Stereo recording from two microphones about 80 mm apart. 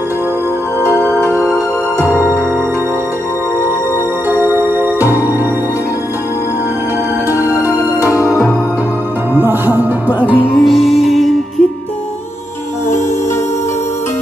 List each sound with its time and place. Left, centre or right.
4.3 s music: right
7.3 s music: right
9.3 s music: right
10.6 s music: centre